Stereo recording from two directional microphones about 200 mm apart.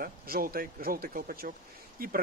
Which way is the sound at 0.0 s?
45° right (ahead or behind).